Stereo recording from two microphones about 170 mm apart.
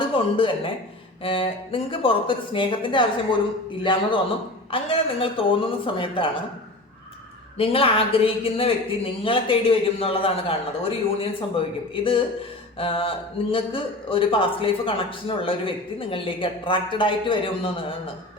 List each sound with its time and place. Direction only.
0.1 s speech: 30° left (ahead or behind)
4.7 s speech: 35° left (ahead or behind)
7.6 s speech: 35° left (ahead or behind)
12.8 s speech: 30° left (ahead or behind)